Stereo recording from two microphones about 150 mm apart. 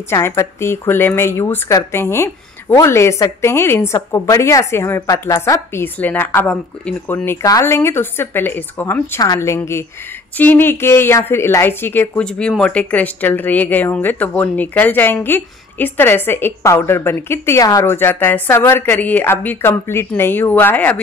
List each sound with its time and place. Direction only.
0.1 s a woman's voice: 20° left (ahead or behind)